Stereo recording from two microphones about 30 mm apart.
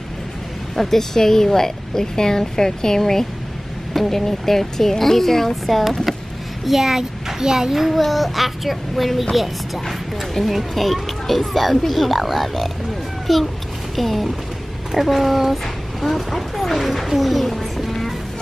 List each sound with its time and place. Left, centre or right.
0.7 s speech: centre
5.7 s a child's voice: centre
7.7 s child singing: centre
8.0 s a child's voice: centre